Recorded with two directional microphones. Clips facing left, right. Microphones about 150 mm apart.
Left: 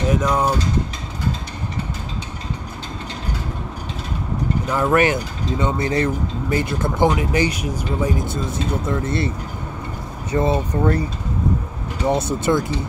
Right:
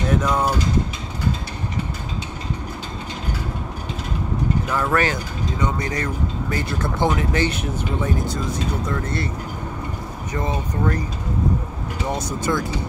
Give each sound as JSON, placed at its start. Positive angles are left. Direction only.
{"t": 0.1, "sound": "speech", "side_deg": 10}
{"t": 4.6, "sound": "speech", "side_deg": 20}
{"t": 8.3, "sound": "speech", "side_deg": 25}
{"t": 10.3, "sound": "speech", "side_deg": 35}
{"t": 12.1, "sound": "speech", "side_deg": 25}